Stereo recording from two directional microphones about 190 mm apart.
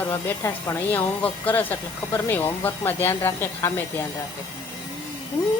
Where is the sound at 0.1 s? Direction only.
15° left (ahead or behind).